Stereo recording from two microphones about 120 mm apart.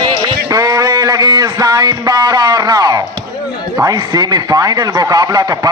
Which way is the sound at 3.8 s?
30° right (ahead or behind).